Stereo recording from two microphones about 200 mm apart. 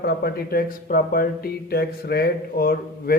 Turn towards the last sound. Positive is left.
turn(degrees=50)  # may be behind; listen again after turning